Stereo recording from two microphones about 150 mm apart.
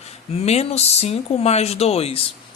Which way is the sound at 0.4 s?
45° left (ahead or behind).